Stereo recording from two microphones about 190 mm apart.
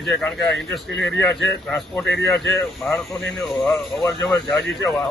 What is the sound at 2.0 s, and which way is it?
Speech, 65° left (ahead or behind).